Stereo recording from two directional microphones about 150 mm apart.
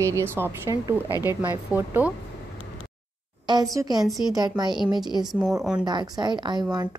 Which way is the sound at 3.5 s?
25° right (ahead or behind).